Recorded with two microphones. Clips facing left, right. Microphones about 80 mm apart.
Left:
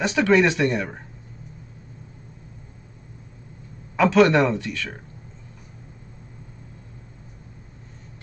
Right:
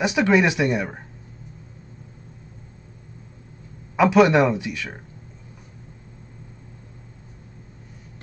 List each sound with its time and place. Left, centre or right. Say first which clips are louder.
0.0 s a man's voice: even; centre
3.9 s a man's voice: right 1 dB; centre